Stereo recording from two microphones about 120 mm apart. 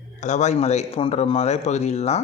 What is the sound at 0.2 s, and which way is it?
A man's voice, 80° left.